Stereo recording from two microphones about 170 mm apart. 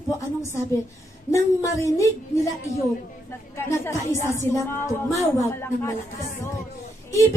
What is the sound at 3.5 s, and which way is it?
A woman's voice, 15° left (ahead or behind).